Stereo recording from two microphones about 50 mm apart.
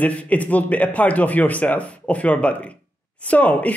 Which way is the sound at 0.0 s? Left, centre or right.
Left.